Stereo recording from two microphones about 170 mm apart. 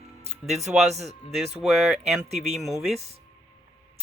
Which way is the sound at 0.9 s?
40° right (ahead or behind).